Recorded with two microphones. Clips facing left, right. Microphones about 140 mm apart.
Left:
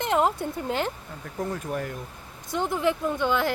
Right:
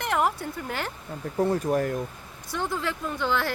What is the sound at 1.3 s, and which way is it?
Speech, 35° right (ahead or behind).